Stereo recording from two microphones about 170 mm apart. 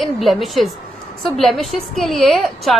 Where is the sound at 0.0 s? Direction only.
Centre (ahead or behind).